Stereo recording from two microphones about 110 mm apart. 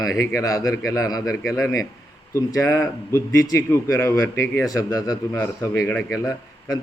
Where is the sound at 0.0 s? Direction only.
30° left (ahead or behind).